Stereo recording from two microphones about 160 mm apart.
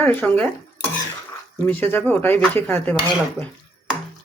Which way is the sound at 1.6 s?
10° left (ahead or behind).